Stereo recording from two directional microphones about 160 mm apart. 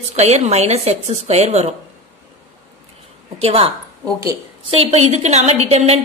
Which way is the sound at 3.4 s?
35° right (ahead or behind).